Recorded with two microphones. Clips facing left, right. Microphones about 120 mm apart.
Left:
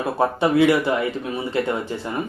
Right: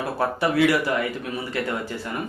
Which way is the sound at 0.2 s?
20° left (ahead or behind).